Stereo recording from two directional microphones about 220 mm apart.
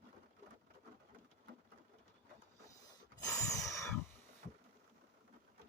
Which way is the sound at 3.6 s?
15° left (ahead or behind).